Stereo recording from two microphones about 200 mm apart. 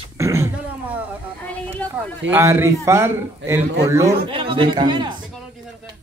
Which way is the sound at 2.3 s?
15° right (ahead or behind).